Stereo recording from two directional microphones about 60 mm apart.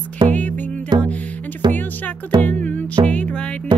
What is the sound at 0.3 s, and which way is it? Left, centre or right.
Music, left.